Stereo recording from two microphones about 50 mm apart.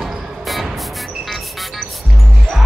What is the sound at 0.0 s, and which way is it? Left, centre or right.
Music, centre.